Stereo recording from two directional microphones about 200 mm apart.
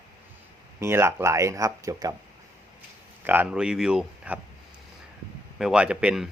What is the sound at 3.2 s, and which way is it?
Speech, 10° right (ahead or behind).